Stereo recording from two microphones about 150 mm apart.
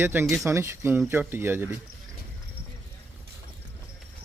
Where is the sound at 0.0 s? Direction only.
15° right (ahead or behind).